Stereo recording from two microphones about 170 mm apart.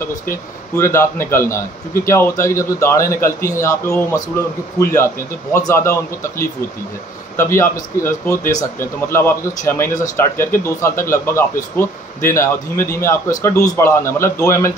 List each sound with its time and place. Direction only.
0.3 s a man's voice: 15° left (ahead or behind)
7.3 s a man's voice: 15° left (ahead or behind)